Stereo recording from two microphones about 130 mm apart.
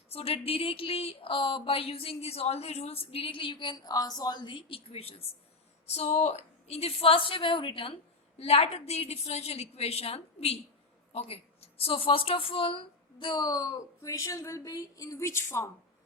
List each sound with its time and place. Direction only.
0.1 s a woman's voice: 50° left (ahead or behind); by 15.7 s 20° left (ahead or behind)